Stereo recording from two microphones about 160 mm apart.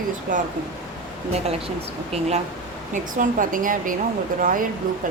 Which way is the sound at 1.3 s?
40° right (ahead or behind).